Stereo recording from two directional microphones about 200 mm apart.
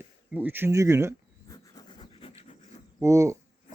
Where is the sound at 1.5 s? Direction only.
20° left (ahead or behind).